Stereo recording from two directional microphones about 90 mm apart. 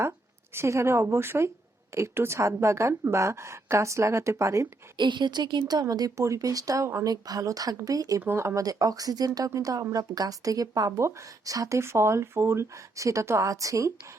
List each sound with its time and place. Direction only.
0.5 s a woman's voice: 30° right (ahead or behind)
4.9 s a woman's voice: 60° right (ahead or behind)
5.8 s speech: 40° right (ahead or behind)
8.2 s speech: 30° right (ahead or behind)